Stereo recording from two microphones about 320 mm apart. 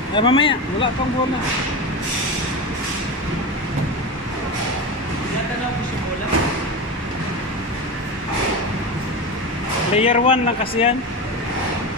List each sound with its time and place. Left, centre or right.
0.1 s speech: centre
9.9 s speech: centre